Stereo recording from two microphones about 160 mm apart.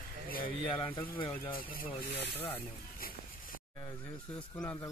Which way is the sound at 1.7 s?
75° left (ahead or behind).